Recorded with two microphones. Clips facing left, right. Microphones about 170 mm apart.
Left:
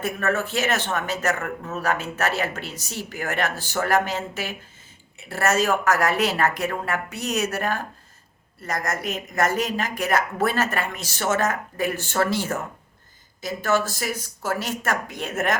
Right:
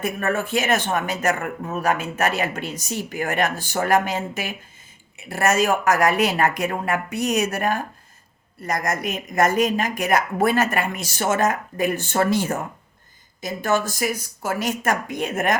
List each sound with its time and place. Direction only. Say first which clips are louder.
0.0 s speech: right 1 dB; 15° right (ahead or behind)